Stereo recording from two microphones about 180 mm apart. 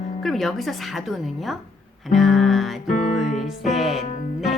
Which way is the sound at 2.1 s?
Centre (ahead or behind).